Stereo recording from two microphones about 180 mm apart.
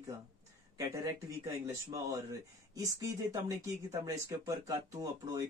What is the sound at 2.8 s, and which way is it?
Speech, 20° right (ahead or behind).